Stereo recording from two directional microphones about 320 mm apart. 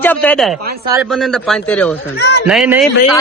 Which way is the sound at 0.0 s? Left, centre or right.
Centre.